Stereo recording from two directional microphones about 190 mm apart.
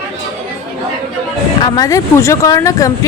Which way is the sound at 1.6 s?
20° left (ahead or behind).